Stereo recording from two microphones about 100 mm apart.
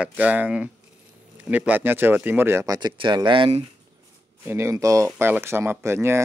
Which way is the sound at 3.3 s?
65° right (ahead or behind).